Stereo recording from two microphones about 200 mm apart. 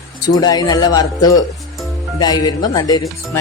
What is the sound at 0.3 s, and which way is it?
Speech, 20° left (ahead or behind).